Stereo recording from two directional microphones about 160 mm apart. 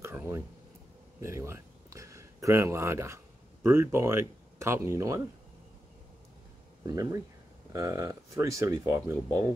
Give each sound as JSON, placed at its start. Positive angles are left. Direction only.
{"t": 0.0, "sound": "a sound", "side_deg": -15}
{"t": 1.2, "sound": "speech", "side_deg": -15}
{"t": 6.9, "sound": "speech", "side_deg": -20}